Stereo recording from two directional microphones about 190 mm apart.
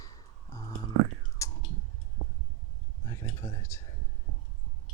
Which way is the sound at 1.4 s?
15° left (ahead or behind).